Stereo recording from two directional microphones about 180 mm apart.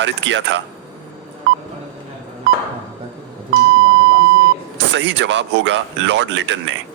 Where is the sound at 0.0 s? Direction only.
90° right.